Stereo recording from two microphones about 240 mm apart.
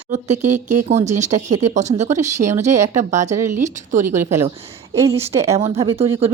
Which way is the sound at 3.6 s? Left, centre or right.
Right.